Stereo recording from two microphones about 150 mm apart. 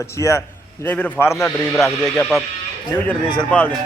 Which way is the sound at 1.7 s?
Centre (ahead or behind).